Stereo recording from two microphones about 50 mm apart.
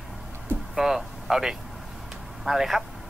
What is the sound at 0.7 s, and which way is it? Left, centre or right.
Speech, centre.